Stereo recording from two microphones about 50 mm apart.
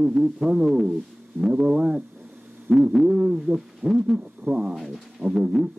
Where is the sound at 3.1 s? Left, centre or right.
Centre.